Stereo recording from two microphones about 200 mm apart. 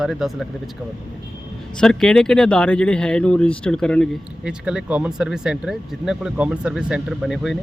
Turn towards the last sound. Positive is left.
turn(degrees=0)  # may be behind; listen again after turning